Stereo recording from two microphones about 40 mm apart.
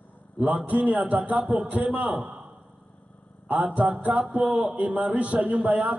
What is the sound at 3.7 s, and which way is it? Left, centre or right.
A man's voice, right.